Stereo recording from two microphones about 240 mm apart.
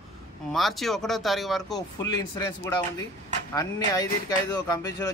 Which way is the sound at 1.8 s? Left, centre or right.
Centre.